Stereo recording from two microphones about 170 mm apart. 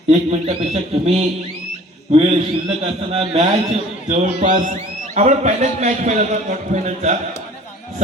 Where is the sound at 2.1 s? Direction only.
35° right (ahead or behind).